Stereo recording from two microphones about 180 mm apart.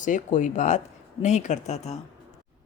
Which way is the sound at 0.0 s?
45° left (ahead or behind).